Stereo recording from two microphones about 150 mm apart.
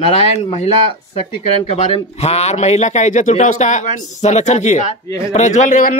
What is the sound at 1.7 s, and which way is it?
A man's voice, 45° left (ahead or behind).